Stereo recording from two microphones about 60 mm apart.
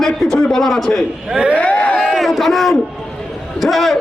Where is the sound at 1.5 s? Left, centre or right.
Left.